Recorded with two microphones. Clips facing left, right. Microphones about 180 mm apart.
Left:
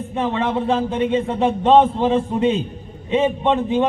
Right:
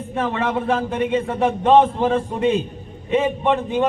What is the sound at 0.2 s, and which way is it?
Speech, 20° left (ahead or behind).